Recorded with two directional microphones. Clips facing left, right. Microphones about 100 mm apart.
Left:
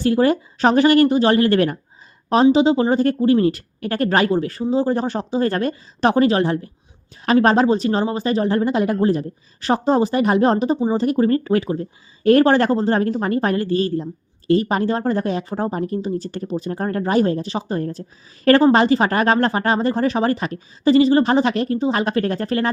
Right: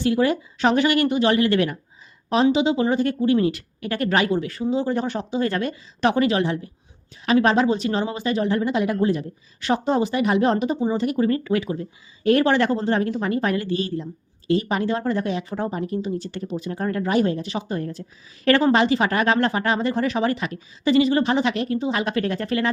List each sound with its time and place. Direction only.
0.0 s speech: 40° left (ahead or behind)